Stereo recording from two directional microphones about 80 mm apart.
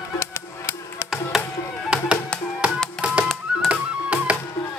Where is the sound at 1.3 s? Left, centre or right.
Centre.